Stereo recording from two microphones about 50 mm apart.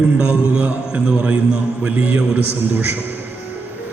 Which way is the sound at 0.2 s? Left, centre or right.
Right.